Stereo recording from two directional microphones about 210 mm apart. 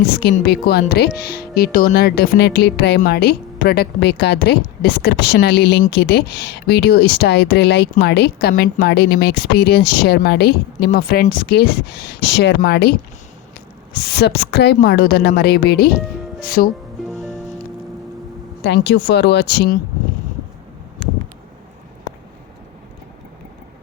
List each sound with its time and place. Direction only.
0.1 s speech: 50° left (ahead or behind)
14.0 s speech: 50° left (ahead or behind)
17.1 s music: centre (ahead or behind)
18.6 s speech: 55° left (ahead or behind)